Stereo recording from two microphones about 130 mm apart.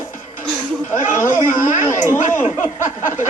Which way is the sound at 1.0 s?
80° left.